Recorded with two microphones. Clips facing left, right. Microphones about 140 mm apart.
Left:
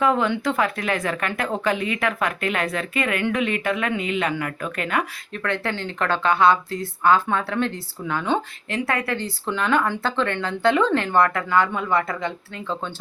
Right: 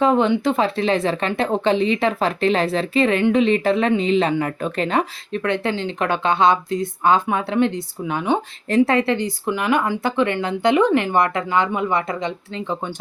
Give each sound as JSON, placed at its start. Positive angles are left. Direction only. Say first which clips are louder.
{"t": 0.0, "sound": "speech", "louder": "right 4 dB", "side_deg": -25}